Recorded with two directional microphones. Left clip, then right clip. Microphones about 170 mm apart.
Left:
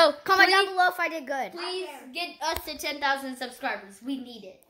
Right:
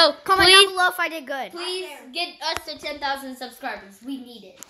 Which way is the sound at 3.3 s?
20° right (ahead or behind).